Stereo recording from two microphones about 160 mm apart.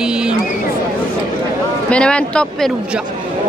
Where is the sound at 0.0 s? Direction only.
5° right (ahead or behind).